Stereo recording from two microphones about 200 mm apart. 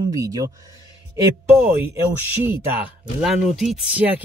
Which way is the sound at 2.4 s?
5° right (ahead or behind).